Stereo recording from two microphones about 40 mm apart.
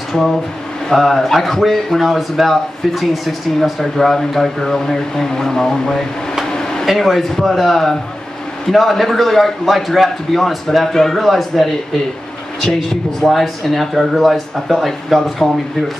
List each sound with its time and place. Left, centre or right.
0.8 s a man's voice: centre
6.5 s a sound: centre
6.9 s a man's voice: centre
13.2 s a man's voice: centre